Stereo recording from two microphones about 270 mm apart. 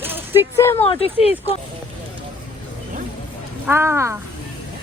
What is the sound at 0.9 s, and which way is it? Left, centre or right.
Speech, left.